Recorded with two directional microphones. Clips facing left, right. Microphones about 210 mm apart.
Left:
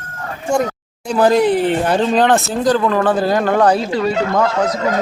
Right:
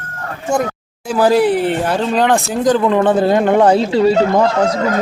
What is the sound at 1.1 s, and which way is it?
Speech, 5° right (ahead or behind).